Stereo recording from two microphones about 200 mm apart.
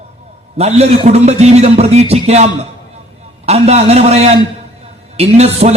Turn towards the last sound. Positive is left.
turn(degrees=-30)  # may be behind; listen again after turning